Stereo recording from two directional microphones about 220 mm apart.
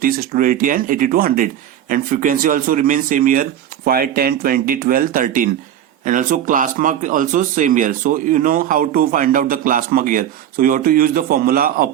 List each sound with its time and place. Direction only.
0.0 s speech: 40° right (ahead or behind)